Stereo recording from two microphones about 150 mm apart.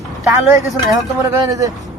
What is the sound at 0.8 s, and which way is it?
Speech, 20° right (ahead or behind).